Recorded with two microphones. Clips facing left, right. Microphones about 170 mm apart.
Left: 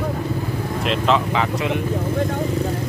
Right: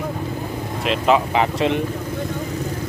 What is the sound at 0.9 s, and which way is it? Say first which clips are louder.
Speech: right 2 dB; 10° right (ahead or behind).